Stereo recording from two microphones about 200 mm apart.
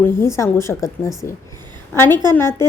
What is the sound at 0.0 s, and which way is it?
A woman's voice, 15° left (ahead or behind).